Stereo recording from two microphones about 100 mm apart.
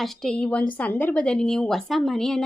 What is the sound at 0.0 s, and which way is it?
A woman's voice, 5° left (ahead or behind).